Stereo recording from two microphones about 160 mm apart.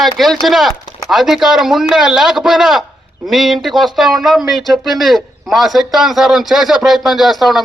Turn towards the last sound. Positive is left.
turn(degrees=0)  # may be behind; listen again after turning